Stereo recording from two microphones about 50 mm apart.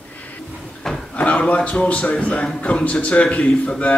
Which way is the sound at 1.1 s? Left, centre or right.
Left.